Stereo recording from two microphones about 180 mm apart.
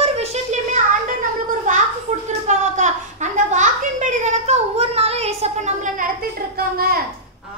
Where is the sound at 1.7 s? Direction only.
45° right (ahead or behind).